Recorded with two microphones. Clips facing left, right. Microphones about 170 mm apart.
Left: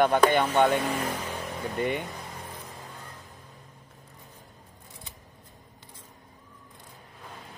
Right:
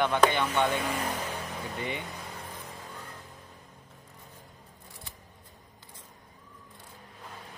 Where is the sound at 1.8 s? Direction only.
50° left (ahead or behind).